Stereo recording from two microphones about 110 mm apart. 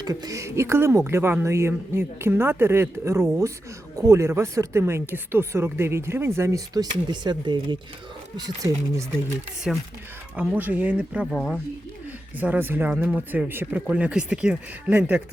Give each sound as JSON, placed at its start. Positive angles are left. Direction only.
{"t": 0.0, "sound": "speech", "side_deg": -35}
{"t": 7.1, "sound": "speech", "side_deg": -45}
{"t": 9.7, "sound": "speech", "side_deg": -5}
{"t": 10.3, "sound": "speech", "side_deg": -15}
{"t": 11.3, "sound": "speech", "side_deg": 0}
{"t": 12.4, "sound": "speech", "side_deg": -15}